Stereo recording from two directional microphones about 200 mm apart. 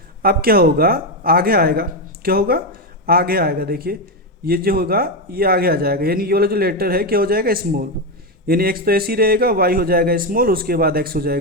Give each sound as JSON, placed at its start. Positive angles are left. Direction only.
{"t": 0.2, "sound": "speech", "side_deg": -50}